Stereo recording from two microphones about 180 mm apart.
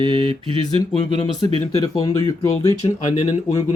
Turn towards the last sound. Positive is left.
turn(degrees=40)  # may be behind; listen again after turning